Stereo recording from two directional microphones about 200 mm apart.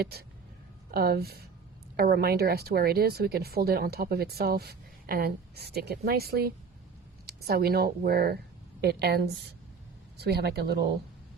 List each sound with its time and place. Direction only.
0.0 s a woman's voice: 50° right (ahead or behind)